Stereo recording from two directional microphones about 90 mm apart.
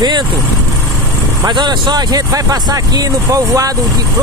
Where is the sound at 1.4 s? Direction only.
55° right (ahead or behind).